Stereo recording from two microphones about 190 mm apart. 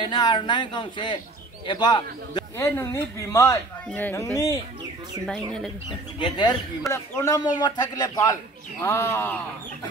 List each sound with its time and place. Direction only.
0.0 s a man's voice: 25° left (ahead or behind)
6.1 s a man's voice: 25° left (ahead or behind)